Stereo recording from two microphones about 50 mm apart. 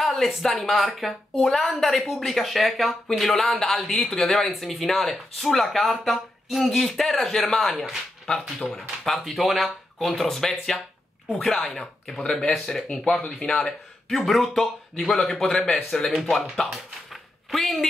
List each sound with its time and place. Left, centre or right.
0.0 s speech: centre
14.0 s speech: centre
16.7 s a sound: centre